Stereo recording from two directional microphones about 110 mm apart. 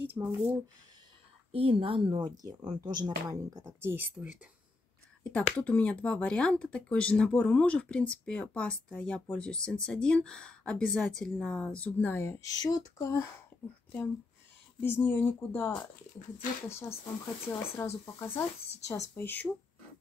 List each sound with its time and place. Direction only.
0.0 s speech: 20° right (ahead or behind)
1.5 s speech: 55° right (ahead or behind); by 4.4 s 15° right (ahead or behind)
5.3 s speech: 15° left (ahead or behind)
14.8 s speech: 20° left (ahead or behind)